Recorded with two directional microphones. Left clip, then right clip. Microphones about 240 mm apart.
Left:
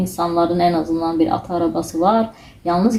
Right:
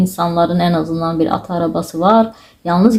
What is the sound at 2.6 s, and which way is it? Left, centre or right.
Speech, right.